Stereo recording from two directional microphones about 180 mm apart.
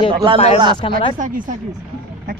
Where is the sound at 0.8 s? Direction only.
30° left (ahead or behind).